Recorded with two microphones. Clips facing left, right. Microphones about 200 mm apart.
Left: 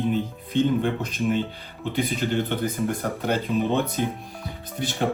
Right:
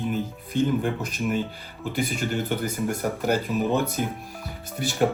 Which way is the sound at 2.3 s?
5° right (ahead or behind).